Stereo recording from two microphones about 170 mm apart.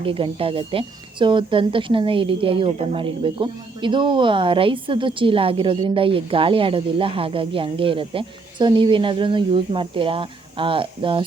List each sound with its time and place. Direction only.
0.0 s a woman's voice: 30° right (ahead or behind)